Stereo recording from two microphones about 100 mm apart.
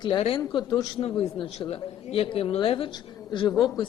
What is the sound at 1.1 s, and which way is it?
Speech, 60° left (ahead or behind).